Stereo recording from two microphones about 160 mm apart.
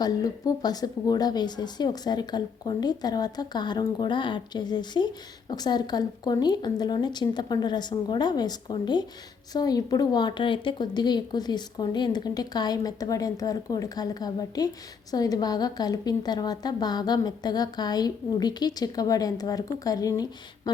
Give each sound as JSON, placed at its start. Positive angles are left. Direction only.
{"t": 0.0, "sound": "a woman's voice", "side_deg": 25}